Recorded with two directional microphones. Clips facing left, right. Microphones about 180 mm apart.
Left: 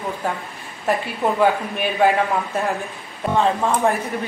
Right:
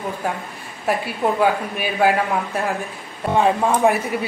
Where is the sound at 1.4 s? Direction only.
5° right (ahead or behind).